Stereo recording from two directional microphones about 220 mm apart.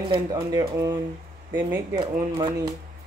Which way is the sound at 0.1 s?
20° right (ahead or behind).